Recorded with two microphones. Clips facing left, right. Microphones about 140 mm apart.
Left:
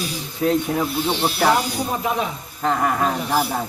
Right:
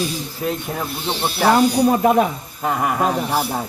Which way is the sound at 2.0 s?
55° right (ahead or behind).